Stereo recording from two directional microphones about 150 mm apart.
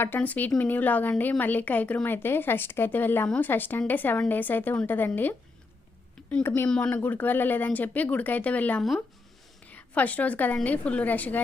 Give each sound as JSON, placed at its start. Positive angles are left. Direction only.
{"t": 0.0, "sound": "a woman's voice", "side_deg": 10}
{"t": 6.3, "sound": "a woman's voice", "side_deg": 10}